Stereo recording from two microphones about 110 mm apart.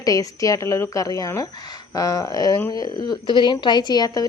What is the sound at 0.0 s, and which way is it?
Speech, 30° left (ahead or behind).